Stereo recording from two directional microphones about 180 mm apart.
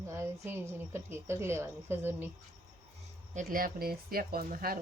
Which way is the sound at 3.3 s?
50° right (ahead or behind).